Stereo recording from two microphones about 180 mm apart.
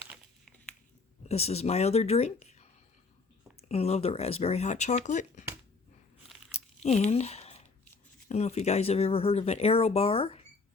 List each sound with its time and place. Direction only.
1.3 s speech: 35° left (ahead or behind)
6.5 s crunch: 35° left (ahead or behind)
8.3 s speech: 35° left (ahead or behind)